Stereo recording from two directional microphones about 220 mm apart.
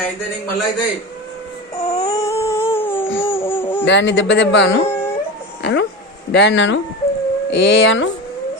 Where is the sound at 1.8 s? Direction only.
30° left (ahead or behind).